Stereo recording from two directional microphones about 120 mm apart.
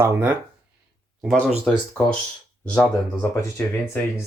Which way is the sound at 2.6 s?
10° left (ahead or behind).